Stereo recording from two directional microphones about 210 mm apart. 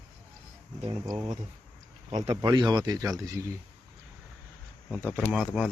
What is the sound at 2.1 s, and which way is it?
A man's voice, 25° right (ahead or behind).